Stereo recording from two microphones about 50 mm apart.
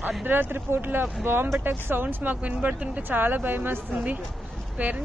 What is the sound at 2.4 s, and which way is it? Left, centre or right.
Speech, right.